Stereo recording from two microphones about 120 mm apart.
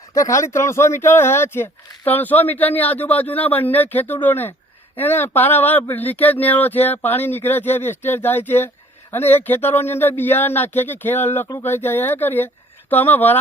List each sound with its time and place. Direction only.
0.1 s speech: 25° left (ahead or behind)